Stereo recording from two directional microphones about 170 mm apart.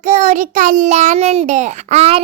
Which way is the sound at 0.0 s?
45° right (ahead or behind).